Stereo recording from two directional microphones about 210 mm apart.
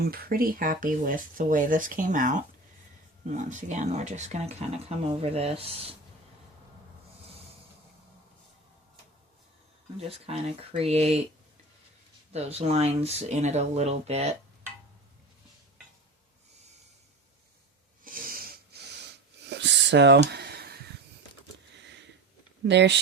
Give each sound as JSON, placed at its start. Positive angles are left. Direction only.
{"t": 0.0, "sound": "speech", "side_deg": -45}
{"t": 10.0, "sound": "speech", "side_deg": -30}
{"t": 12.3, "sound": "speech", "side_deg": -30}
{"t": 18.0, "sound": "snort", "side_deg": -40}
{"t": 19.5, "sound": "a sound", "side_deg": -55}
{"t": 21.8, "sound": "sniff", "side_deg": -55}
{"t": 22.6, "sound": "speech", "side_deg": -55}